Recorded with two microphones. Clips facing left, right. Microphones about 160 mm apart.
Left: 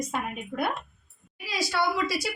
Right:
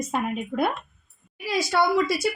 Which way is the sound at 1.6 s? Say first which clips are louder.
Right 5 dB; 50° right (ahead or behind).